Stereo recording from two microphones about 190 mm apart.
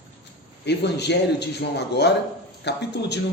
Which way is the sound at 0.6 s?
65° left (ahead or behind).